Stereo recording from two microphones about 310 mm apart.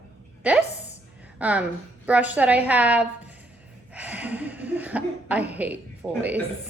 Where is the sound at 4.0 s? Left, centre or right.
Centre.